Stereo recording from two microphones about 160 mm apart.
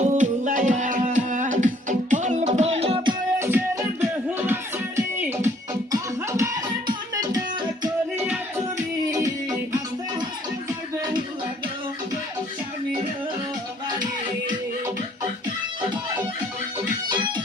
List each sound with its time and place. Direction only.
0.0 s music: 50° right (ahead or behind); by 3.2 s 35° right (ahead or behind)
3.3 s music: 15° right (ahead or behind)
8.1 s music: 10° right (ahead or behind)
17.1 s music: 30° right (ahead or behind)